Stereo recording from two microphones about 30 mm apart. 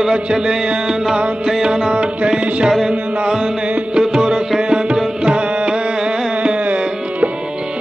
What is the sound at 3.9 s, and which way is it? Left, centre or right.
Music, right.